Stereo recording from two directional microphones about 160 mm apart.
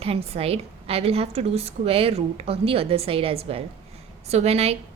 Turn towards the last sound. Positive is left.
turn(degrees=-40)  # may be behind; listen again after turning